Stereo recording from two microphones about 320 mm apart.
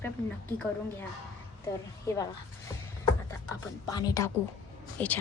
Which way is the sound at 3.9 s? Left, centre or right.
Centre.